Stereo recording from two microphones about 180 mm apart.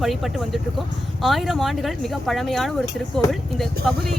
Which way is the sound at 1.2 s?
Centre (ahead or behind).